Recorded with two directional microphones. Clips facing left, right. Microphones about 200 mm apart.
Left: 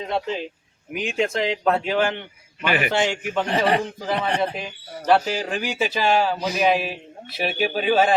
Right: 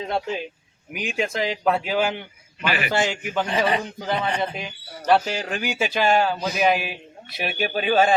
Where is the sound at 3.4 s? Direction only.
65° left (ahead or behind).